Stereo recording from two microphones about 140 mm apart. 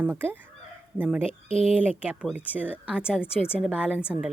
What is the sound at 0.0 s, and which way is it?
Speech, 15° right (ahead or behind).